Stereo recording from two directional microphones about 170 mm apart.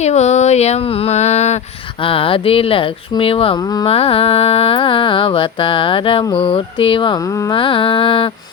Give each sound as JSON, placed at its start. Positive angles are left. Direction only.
{"t": 0.0, "sound": "speech", "side_deg": 40}